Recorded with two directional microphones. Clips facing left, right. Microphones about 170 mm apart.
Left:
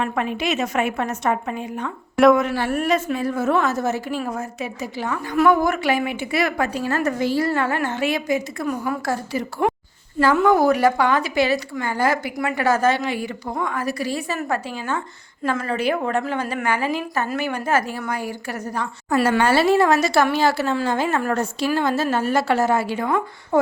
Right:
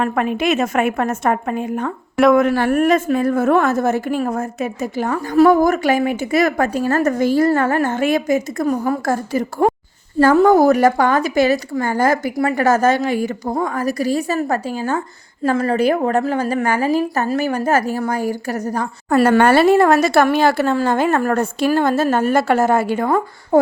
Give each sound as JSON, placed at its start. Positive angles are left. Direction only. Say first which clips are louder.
{"t": 0.0, "sound": "a woman's voice", "louder": "right 5 dB", "side_deg": -50}